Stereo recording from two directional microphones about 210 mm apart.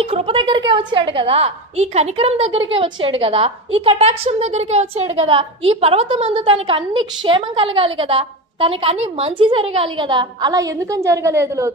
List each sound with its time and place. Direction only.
0.0 s a woman's voice: 25° right (ahead or behind)